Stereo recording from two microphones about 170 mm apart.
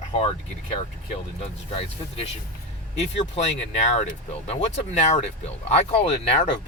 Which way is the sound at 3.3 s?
40° left (ahead or behind).